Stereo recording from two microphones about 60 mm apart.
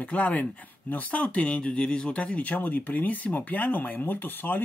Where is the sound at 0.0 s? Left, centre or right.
Left.